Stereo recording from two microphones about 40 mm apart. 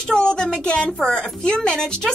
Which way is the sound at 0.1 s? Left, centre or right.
Centre.